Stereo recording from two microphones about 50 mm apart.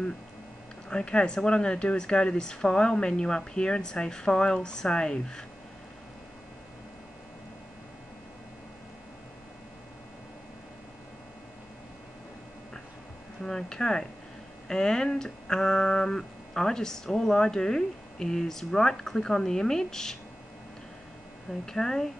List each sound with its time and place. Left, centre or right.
0.8 s speech: centre
13.4 s speech: centre
21.6 s speech: centre